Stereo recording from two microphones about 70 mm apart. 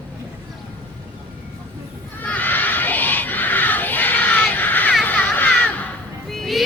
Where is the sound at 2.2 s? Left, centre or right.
Left.